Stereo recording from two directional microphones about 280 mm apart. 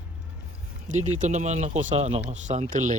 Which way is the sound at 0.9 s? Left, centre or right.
Right.